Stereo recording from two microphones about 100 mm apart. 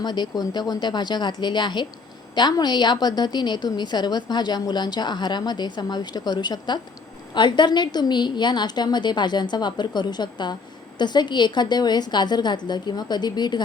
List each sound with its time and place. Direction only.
0.0 s a woman's voice: 45° left (ahead or behind)